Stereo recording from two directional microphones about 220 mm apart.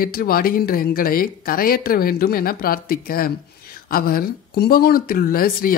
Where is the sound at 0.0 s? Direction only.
40° left (ahead or behind).